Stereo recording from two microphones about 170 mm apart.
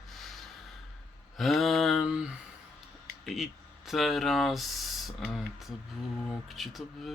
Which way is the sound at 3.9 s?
Centre (ahead or behind).